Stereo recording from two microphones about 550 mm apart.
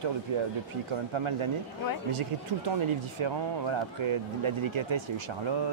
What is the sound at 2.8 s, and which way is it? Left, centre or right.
Speech, right.